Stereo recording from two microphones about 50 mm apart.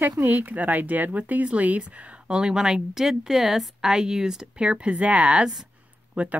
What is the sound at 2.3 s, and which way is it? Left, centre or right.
Speech, centre.